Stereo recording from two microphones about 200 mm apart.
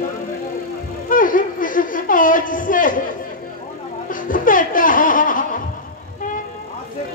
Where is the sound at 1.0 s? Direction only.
40° left (ahead or behind).